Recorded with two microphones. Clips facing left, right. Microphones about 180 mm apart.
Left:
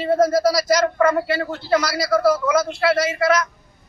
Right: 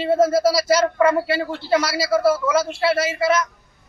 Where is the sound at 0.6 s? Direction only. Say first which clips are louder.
Even; 30° right (ahead or behind).